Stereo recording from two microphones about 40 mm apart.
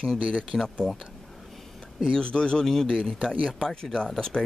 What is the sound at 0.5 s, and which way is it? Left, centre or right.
Speech, left.